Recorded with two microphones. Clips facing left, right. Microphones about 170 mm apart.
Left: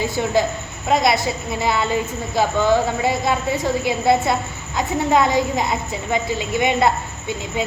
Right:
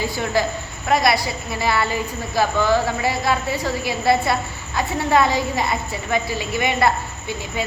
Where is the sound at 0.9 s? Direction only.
20° left (ahead or behind).